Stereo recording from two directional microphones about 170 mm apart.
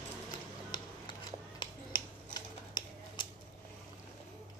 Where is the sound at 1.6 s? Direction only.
25° left (ahead or behind).